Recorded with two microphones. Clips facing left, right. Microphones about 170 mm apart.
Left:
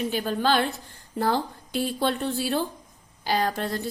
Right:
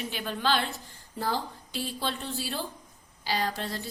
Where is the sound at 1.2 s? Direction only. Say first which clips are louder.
Left 6 dB; 55° left (ahead or behind).